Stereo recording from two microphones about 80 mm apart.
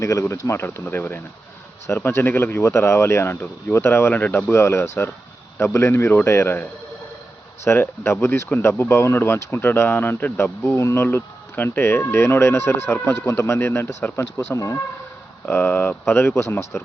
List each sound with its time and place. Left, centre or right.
0.0 s speech: left
15.4 s speech: left